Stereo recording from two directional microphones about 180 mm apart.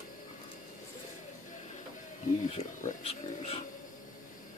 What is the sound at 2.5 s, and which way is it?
Speech, 40° left (ahead or behind).